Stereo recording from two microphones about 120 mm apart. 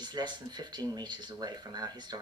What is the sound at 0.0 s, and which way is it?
Speech, 35° right (ahead or behind).